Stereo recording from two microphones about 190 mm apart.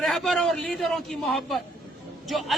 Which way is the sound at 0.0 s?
Centre (ahead or behind).